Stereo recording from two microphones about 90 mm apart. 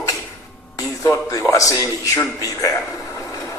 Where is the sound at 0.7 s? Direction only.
35° left (ahead or behind).